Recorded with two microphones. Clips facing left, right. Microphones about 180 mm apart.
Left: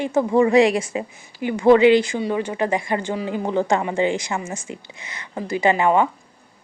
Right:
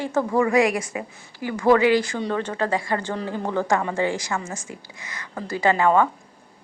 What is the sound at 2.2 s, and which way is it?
A woman's voice, 10° left (ahead or behind).